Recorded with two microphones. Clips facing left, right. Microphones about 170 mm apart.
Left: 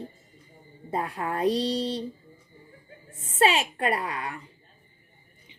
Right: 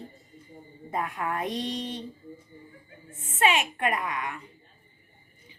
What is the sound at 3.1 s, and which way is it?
Speech, 35° left (ahead or behind).